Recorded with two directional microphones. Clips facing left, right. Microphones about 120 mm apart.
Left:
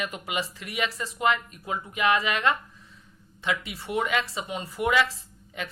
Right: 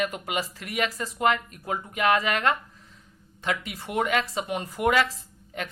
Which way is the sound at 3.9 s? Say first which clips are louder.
Right 1 dB; 45° right (ahead or behind).